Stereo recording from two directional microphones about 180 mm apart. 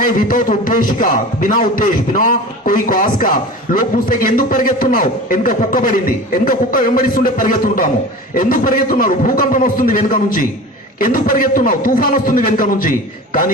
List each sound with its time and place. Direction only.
0.0 s a man's voice: 50° left (ahead or behind)